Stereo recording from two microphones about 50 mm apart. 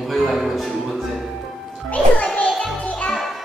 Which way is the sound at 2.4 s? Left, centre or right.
Centre.